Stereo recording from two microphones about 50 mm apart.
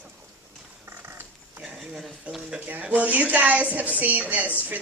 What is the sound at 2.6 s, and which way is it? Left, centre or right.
A woman's voice, right.